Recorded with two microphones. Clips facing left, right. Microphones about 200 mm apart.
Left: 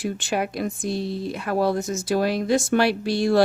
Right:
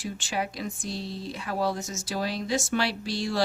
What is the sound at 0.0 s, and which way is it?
Speech, 60° left (ahead or behind).